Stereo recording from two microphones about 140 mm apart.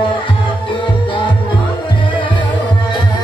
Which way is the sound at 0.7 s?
35° left (ahead or behind).